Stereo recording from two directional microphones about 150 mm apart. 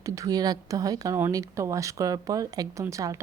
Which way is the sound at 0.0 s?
20° right (ahead or behind).